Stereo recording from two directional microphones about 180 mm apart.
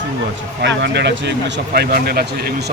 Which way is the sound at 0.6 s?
75° right (ahead or behind).